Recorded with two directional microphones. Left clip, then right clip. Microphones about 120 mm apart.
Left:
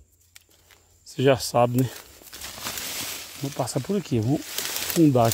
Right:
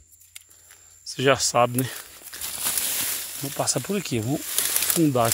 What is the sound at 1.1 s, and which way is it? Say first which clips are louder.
Speech: even; 35° left (ahead or behind).